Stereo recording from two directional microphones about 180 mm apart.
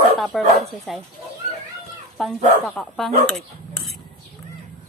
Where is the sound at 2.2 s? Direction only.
Centre (ahead or behind).